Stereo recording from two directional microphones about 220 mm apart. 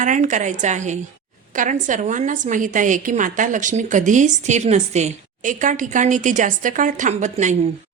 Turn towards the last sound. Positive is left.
turn(degrees=-35)  # may be behind; listen again after turning